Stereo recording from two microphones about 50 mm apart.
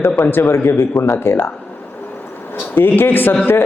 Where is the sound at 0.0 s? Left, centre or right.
Left.